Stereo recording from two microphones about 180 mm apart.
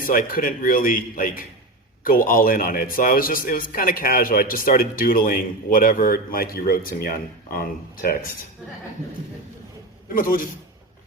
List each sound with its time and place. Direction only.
0.0 s a man's voice: 50° left (ahead or behind)
10.2 s a man's voice: 50° left (ahead or behind)